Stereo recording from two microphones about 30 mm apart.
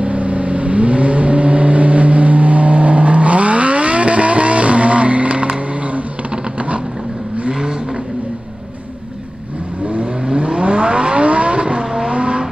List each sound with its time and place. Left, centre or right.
0.0 s vehicle: right
10.2 s vehicle: right